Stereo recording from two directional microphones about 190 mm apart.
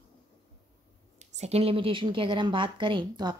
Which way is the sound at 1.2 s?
35° right (ahead or behind).